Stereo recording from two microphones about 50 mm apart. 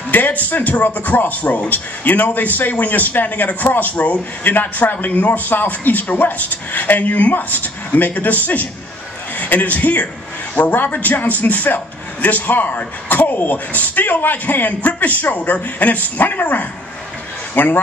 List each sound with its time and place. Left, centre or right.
0.1 s a man's voice: left